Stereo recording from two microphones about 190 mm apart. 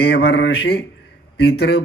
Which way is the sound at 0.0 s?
60° left (ahead or behind).